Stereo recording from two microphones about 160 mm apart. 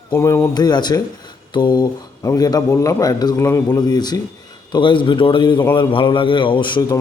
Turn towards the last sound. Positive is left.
turn(degrees=30)  # may be behind; listen again after turning